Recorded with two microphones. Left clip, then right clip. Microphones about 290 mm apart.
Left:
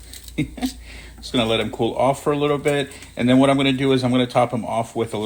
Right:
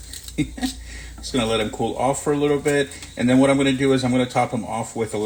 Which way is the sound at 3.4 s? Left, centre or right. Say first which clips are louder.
Even; left.